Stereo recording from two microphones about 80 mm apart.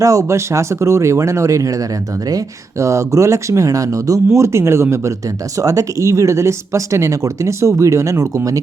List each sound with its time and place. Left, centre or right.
0.0 s speech: right